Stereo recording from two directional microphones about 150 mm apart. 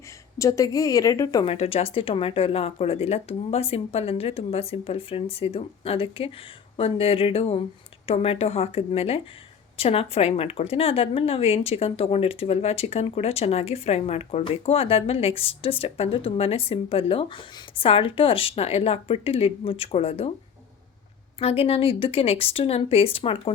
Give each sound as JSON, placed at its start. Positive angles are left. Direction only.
{"t": 0.3, "sound": "a woman's voice", "side_deg": 20}
{"t": 1.5, "sound": "speech", "side_deg": 40}
{"t": 21.3, "sound": "speech", "side_deg": 40}